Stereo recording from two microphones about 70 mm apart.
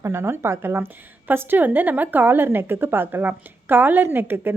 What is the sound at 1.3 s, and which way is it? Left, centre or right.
A woman's voice, right.